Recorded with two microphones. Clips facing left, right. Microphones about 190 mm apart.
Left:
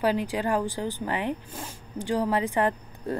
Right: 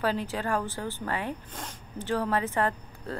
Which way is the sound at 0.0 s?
15° left (ahead or behind).